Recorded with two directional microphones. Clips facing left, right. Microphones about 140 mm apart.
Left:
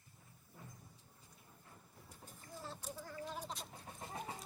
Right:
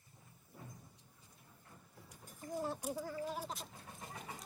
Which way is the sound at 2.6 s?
15° right (ahead or behind).